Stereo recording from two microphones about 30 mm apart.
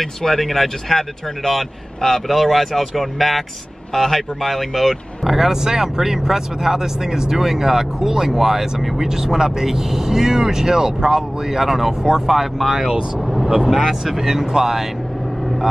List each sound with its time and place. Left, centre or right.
0.0 s speech: centre
5.2 s speech: centre
13.2 s vehicle: centre
13.5 s speech: centre